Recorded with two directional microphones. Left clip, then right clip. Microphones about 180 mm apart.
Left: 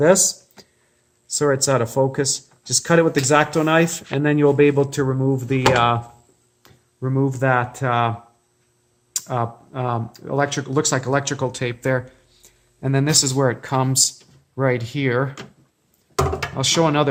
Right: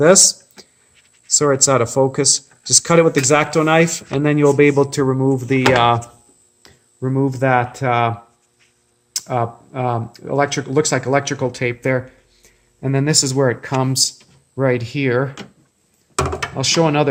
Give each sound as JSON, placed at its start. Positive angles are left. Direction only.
{"t": 0.0, "sound": "speech", "side_deg": -20}
{"t": 7.0, "sound": "speech", "side_deg": -15}
{"t": 9.1, "sound": "speech", "side_deg": -10}
{"t": 16.4, "sound": "speech", "side_deg": -5}